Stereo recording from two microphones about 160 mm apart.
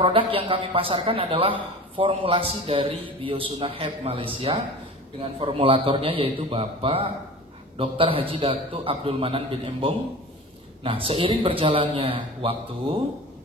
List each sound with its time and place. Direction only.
0.0 s speech: 35° right (ahead or behind)